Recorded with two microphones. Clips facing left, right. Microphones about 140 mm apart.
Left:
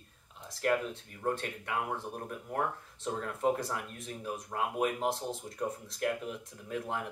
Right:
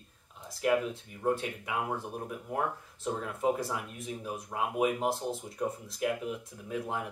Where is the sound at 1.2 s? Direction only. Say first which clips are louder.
Right 3 dB; 5° right (ahead or behind).